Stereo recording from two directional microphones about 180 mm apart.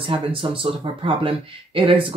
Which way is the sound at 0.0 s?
30° right (ahead or behind).